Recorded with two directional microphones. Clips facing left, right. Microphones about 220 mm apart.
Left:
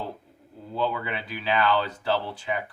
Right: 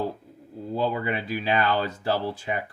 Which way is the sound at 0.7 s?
45° right (ahead or behind).